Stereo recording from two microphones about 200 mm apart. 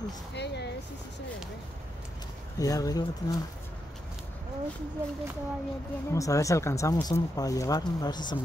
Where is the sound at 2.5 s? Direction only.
15° left (ahead or behind).